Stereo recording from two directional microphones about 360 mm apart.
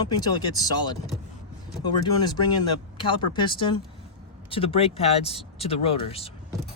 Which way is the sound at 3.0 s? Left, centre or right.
Centre.